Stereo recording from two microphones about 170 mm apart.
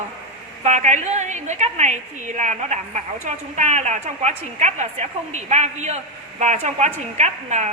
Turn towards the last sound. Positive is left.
turn(degrees=-40)  # may be behind; listen again after turning